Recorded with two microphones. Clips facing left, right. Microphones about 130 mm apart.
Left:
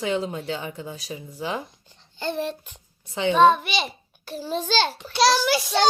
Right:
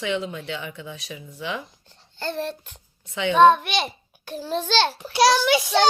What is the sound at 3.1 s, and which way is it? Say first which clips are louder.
Speech: left 1 dB; 35° left (ahead or behind).